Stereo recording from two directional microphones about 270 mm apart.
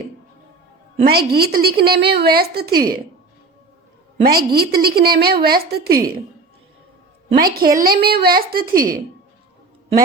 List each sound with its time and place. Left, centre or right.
1.0 s a woman's voice: right
4.2 s a woman's voice: right
7.3 s a woman's voice: right